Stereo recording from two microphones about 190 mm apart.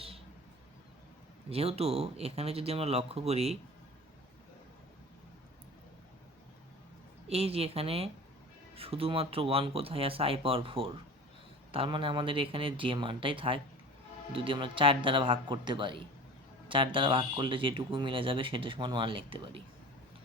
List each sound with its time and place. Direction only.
1.5 s speech: 30° right (ahead or behind)
7.3 s speech: 30° right (ahead or behind)